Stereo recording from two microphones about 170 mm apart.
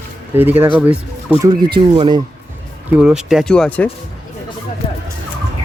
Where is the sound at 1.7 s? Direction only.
30° right (ahead or behind).